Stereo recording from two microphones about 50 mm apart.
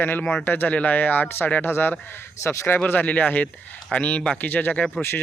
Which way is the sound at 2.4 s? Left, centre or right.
Left.